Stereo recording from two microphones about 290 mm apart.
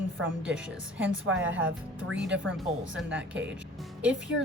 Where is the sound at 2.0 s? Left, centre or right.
Right.